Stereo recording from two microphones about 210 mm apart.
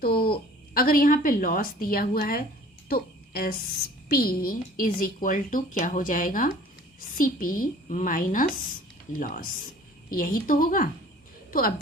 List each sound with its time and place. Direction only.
0.0 s a woman's voice: 45° left (ahead or behind)